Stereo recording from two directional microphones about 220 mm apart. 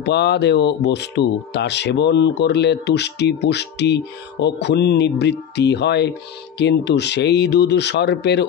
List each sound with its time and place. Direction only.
0.0 s speech: 50° left (ahead or behind)